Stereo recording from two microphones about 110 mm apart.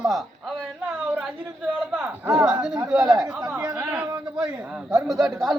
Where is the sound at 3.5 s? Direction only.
10° right (ahead or behind).